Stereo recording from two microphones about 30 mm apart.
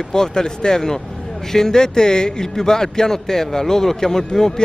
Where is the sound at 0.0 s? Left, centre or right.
Centre.